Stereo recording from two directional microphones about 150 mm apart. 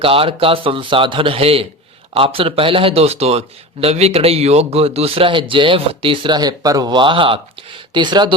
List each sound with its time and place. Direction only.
0.0 s speech: 40° right (ahead or behind)